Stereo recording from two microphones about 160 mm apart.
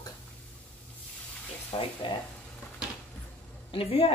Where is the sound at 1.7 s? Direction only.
30° left (ahead or behind).